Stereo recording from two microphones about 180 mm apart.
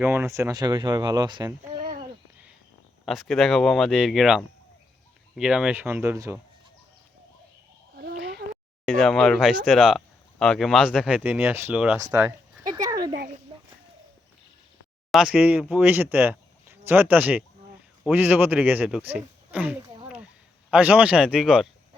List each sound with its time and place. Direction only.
0.0 s speech: 10° right (ahead or behind)
3.1 s speech: centre (ahead or behind)
7.9 s a sound: 60° right (ahead or behind)
8.9 s speech: centre (ahead or behind)
12.1 s a sound: 20° right (ahead or behind)
15.1 s speech: 5° right (ahead or behind)